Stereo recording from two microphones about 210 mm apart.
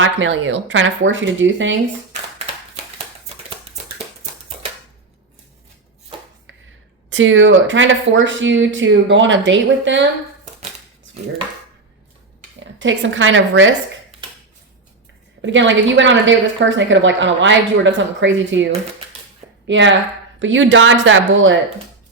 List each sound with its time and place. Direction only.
0.0 s a woman's voice: 60° right (ahead or behind)
3.9 s a sound: 30° right (ahead or behind)
7.1 s a woman's voice: 65° right (ahead or behind)
12.8 s a woman's voice: 60° right (ahead or behind)
15.4 s a woman's voice: 60° right (ahead or behind)